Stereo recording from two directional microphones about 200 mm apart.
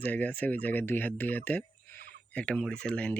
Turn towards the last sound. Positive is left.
turn(degrees=5)  # may be behind; listen again after turning